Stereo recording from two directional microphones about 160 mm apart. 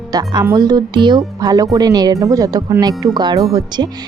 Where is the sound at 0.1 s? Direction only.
25° right (ahead or behind).